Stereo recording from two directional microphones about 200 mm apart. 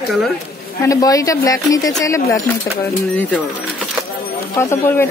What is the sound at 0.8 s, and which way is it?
A woman's voice, 15° left (ahead or behind).